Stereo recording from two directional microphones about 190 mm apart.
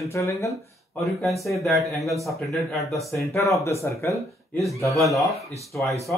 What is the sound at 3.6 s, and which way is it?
Speech, 15° left (ahead or behind).